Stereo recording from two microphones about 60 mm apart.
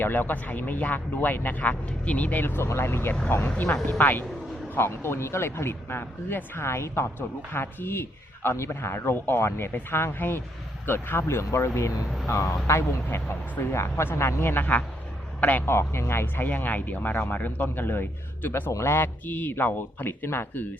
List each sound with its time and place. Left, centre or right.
0.0 s speech: left
2.6 s speech: left
13.1 s speech: left
14.6 s a man's voice: left
15.6 s speech: left